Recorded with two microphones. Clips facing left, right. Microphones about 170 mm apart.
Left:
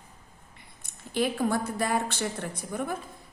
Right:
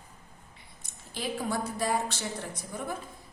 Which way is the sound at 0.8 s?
60° left (ahead or behind).